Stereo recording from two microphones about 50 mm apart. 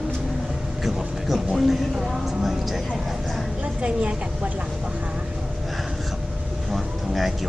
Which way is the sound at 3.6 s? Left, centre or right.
Right.